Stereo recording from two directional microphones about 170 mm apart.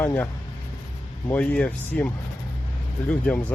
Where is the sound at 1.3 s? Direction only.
10° left (ahead or behind).